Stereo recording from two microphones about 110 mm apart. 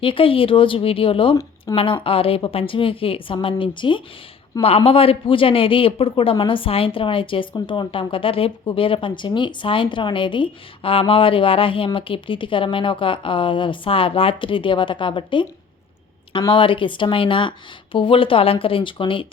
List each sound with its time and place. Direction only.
0.0 s speech: 55° left (ahead or behind)
4.6 s a man's voice: 60° left (ahead or behind)
16.5 s speech: 50° left (ahead or behind)